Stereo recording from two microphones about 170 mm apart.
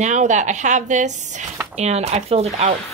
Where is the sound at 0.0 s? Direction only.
45° right (ahead or behind).